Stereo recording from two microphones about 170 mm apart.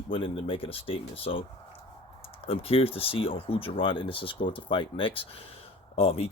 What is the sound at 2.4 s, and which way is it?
Speech, 35° left (ahead or behind).